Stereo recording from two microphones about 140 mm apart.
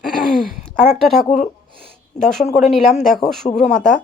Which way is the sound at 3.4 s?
45° left (ahead or behind).